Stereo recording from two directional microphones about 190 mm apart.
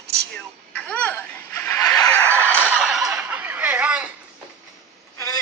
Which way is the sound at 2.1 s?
10° left (ahead or behind).